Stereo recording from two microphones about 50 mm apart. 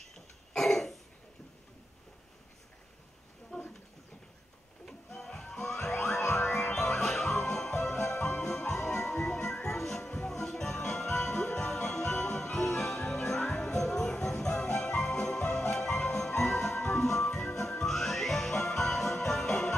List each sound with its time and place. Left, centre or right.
0.6 s cough: centre
3.5 s a sound: left
4.8 s music: centre